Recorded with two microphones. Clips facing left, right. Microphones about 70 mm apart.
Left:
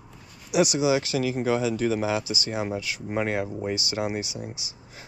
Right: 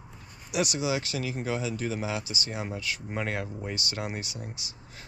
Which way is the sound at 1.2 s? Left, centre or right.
Left.